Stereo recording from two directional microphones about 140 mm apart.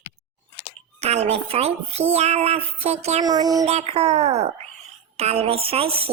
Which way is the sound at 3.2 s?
25° right (ahead or behind).